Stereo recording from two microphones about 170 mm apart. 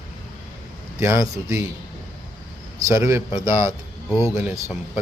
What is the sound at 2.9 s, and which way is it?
Speech, 15° right (ahead or behind).